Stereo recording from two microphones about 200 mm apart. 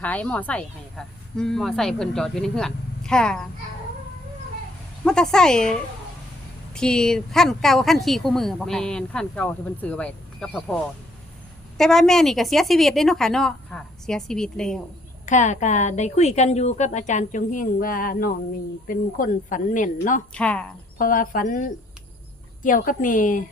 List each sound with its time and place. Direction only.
0.0 s speech: 5° left (ahead or behind)
5.0 s speech: 5° left (ahead or behind)
6.7 s speech: 5° left (ahead or behind)
11.8 s speech: 5° left (ahead or behind)
15.3 s a woman's voice: 35° left (ahead or behind)
20.3 s speech: 5° left (ahead or behind)
21.0 s a woman's voice: 45° left (ahead or behind)